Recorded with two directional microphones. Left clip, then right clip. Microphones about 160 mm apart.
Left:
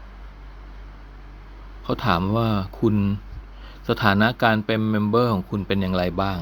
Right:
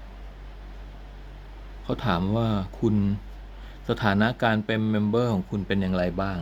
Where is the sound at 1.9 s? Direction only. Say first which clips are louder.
Left 5 dB; 20° left (ahead or behind).